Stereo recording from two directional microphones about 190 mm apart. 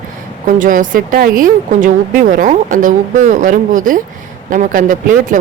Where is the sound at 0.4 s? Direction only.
45° right (ahead or behind).